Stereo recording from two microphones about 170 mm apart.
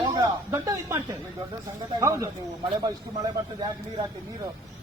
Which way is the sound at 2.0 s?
20° right (ahead or behind).